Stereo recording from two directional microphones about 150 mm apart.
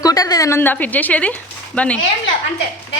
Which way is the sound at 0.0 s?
25° left (ahead or behind).